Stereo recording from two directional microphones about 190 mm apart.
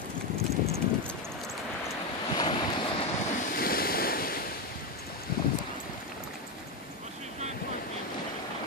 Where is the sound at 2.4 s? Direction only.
25° left (ahead or behind).